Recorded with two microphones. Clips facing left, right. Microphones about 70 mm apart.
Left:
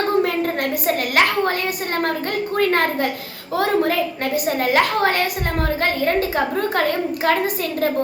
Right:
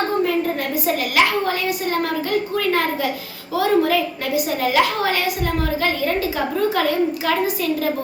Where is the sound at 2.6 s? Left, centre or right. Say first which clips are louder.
Left 5 dB; left.